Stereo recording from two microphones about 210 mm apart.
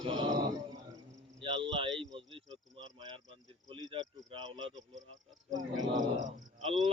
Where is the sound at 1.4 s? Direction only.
25° right (ahead or behind).